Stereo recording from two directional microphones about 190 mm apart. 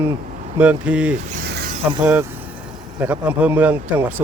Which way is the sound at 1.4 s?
60° right (ahead or behind).